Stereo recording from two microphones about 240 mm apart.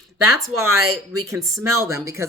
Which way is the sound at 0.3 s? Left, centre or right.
Centre.